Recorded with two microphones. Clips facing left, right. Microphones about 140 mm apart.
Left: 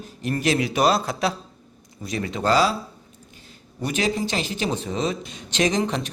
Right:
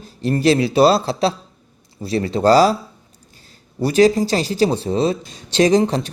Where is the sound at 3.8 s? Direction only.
35° right (ahead or behind).